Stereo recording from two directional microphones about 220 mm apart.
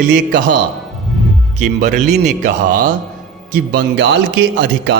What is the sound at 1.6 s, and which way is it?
A man's voice, 35° right (ahead or behind).